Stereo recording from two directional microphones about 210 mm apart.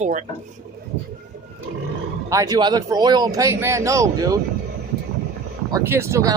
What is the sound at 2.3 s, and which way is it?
Speech, 15° right (ahead or behind).